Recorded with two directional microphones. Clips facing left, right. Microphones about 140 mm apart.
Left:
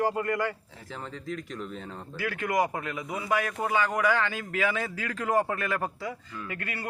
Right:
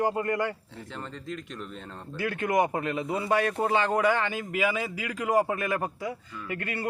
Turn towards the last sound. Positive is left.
turn(degrees=-20)  # may be behind; listen again after turning